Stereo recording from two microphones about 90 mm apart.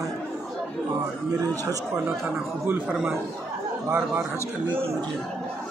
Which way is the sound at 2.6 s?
20° right (ahead or behind).